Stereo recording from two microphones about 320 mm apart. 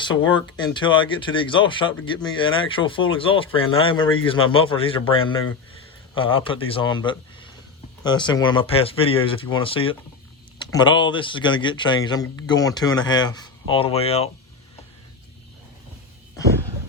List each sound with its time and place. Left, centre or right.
0.5 s a man's voice: centre